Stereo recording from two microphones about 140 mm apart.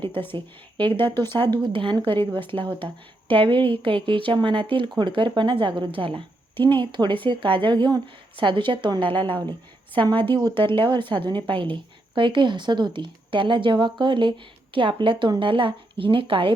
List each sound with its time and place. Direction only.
0.0 s a woman's voice: 40° right (ahead or behind)
0.8 s speech: 15° left (ahead or behind)
1.3 s speech: 35° right (ahead or behind)